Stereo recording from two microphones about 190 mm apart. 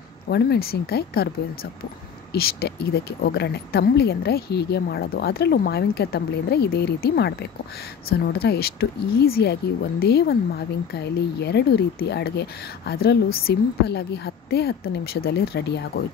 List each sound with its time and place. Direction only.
0.3 s speech: 55° left (ahead or behind)